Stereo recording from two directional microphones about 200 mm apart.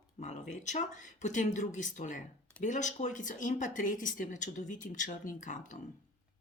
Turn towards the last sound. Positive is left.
turn(degrees=40)  # may be behind; listen again after turning